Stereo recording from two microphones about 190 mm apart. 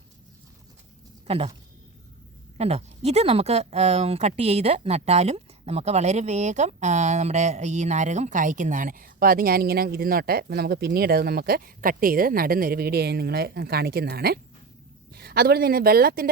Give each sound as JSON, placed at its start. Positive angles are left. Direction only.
{"t": 1.3, "sound": "speech", "side_deg": -30}
{"t": 2.6, "sound": "speech", "side_deg": -35}